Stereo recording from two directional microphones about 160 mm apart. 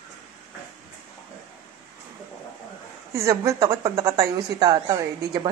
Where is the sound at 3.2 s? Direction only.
20° right (ahead or behind).